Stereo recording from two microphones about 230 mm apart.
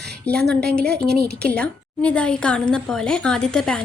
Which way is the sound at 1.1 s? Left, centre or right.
Right.